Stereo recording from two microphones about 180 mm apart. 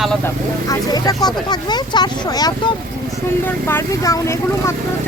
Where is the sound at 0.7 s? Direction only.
20° left (ahead or behind).